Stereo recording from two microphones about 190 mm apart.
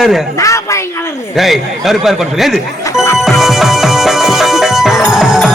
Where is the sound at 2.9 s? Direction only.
15° left (ahead or behind).